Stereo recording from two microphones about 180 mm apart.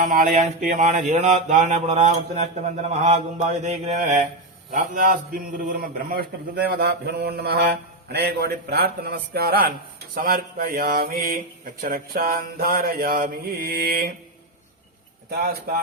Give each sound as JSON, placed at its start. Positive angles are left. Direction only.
{"t": 0.0, "sound": "mantra", "side_deg": -50}
{"t": 4.7, "sound": "a man's voice", "side_deg": -45}
{"t": 15.3, "sound": "a man's voice", "side_deg": -60}